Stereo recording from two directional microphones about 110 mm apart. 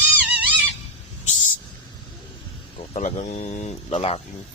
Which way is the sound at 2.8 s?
70° left (ahead or behind).